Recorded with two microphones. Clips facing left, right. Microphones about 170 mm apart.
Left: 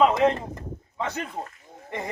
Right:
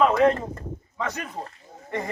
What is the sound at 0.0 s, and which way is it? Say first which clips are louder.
A man's voice: right 1 dB; 20° left (ahead or behind).